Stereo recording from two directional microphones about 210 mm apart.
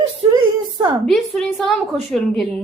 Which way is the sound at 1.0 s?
Centre (ahead or behind).